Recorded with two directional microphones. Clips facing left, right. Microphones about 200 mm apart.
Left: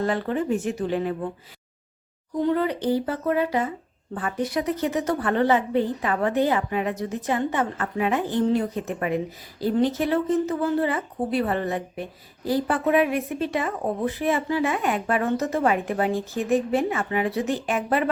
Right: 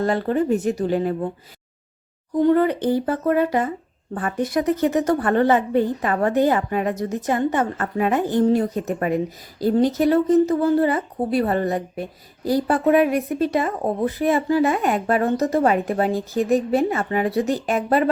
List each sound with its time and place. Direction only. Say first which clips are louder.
0.0 s speech: right 4 dB; 40° right (ahead or behind)
2.4 s a woman's voice: right 6 dB; 50° right (ahead or behind)